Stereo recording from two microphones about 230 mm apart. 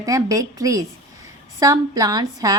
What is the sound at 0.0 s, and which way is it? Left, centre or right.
A woman's voice, centre.